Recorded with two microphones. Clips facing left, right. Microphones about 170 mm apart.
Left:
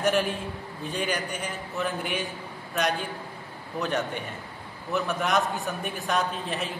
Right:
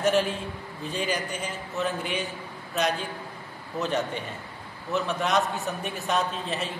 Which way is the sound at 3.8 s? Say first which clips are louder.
Right 1 dB; centre (ahead or behind).